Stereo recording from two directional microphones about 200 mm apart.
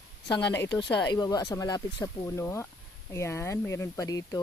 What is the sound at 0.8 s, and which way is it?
Speech, 20° left (ahead or behind).